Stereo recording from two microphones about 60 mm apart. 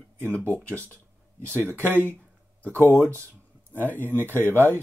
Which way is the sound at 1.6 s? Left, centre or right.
Left.